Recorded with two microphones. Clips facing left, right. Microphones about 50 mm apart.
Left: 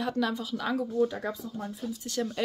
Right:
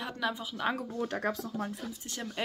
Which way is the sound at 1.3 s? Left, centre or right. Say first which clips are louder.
Right 1 dB; right.